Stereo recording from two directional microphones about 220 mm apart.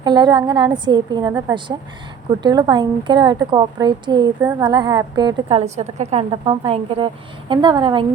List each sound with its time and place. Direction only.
0.0 s a woman's voice: 20° right (ahead or behind)